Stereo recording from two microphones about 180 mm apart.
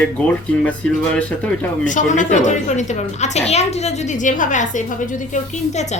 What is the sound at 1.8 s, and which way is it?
A woman's voice, 45° left (ahead or behind).